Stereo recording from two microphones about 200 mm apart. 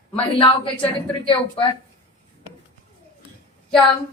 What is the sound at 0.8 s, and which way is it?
Speech, 25° left (ahead or behind).